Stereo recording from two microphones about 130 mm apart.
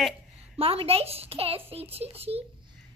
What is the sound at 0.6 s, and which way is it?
A child's voice, 45° right (ahead or behind).